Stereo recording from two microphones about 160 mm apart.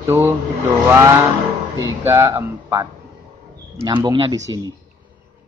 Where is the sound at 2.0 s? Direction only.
15° right (ahead or behind).